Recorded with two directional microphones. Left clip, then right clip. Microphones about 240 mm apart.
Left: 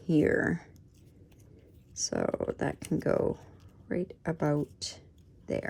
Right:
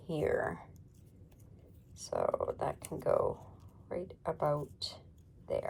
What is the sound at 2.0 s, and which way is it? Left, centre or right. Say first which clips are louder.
Speech: left 2 dB; left.